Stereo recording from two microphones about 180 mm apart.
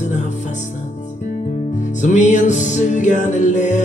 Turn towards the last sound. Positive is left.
turn(degrees=40)  # may be behind; listen again after turning